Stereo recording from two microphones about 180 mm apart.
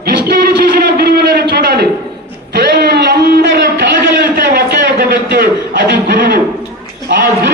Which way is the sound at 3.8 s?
55° right (ahead or behind).